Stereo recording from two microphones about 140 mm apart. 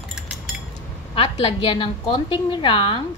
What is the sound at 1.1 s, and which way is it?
A woman's voice, 40° left (ahead or behind).